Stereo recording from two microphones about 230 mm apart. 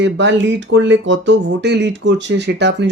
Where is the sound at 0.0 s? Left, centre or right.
Right.